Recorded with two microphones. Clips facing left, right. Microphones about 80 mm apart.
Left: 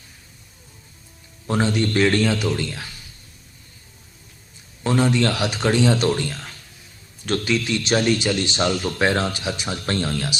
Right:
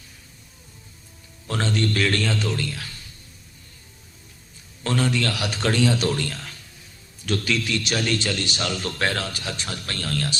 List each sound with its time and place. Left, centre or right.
1.5 s a man's voice: centre
2.6 s speech: left
4.8 s a sound: centre
5.2 s speech: left
5.5 s a man's voice: centre
8.8 s a man's voice: centre
9.1 s a man's voice: left